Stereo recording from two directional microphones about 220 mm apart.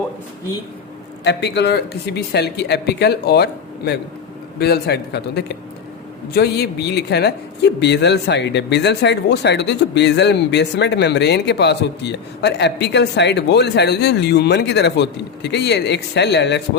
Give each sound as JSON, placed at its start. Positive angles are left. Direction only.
{"t": 1.2, "sound": "speech", "side_deg": 50}